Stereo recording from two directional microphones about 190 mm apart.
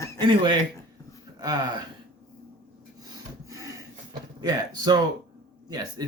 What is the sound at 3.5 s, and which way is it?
Gasp, 20° right (ahead or behind).